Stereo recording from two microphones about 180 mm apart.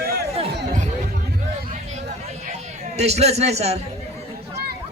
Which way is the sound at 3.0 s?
35° right (ahead or behind).